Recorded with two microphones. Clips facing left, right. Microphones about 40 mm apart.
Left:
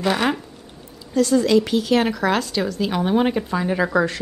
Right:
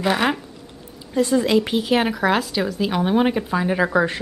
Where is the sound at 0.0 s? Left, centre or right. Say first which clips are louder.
Even; centre.